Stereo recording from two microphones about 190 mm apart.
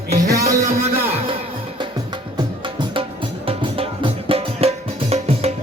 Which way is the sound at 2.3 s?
25° right (ahead or behind).